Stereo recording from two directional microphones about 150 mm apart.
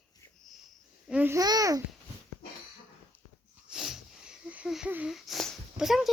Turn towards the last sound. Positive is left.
turn(degrees=0)  # may be behind; listen again after turning